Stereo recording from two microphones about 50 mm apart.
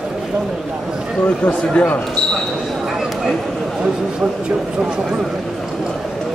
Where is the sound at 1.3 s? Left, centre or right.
Centre.